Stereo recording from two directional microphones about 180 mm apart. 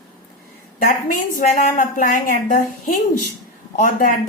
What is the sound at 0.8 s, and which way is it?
Speech, 50° left (ahead or behind).